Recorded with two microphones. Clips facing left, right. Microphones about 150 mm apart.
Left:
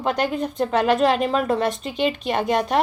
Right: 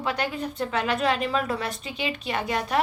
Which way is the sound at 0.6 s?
45° left (ahead or behind).